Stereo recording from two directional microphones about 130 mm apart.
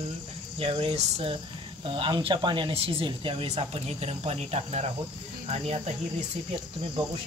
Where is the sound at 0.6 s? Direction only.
45° right (ahead or behind).